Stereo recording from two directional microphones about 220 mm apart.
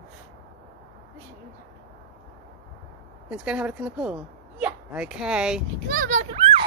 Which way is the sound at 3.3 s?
5° right (ahead or behind).